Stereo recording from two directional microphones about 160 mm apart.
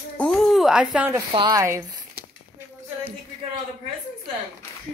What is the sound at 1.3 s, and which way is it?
Speech, 25° right (ahead or behind).